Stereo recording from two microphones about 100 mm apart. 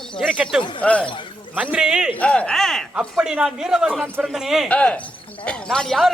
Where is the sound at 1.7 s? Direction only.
10° right (ahead or behind).